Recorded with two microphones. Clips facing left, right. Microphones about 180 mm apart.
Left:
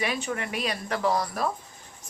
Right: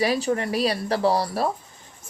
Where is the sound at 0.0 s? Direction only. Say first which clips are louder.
Right 7 dB; 35° right (ahead or behind).